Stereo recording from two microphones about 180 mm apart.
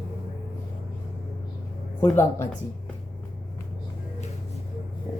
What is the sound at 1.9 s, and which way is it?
Speech, 10° left (ahead or behind).